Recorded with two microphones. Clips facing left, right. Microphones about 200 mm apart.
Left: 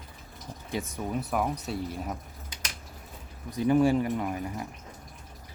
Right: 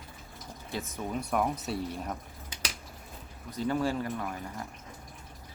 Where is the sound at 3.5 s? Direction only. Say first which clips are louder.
Left 7 dB; 15° left (ahead or behind).